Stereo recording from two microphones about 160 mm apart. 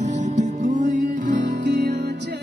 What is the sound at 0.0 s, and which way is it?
Music, 50° right (ahead or behind).